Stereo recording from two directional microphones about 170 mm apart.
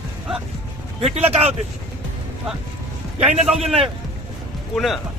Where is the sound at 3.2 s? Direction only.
40° right (ahead or behind).